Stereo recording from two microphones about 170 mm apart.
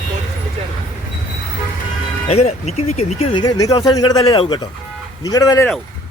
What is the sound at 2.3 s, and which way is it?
Speech, 40° left (ahead or behind).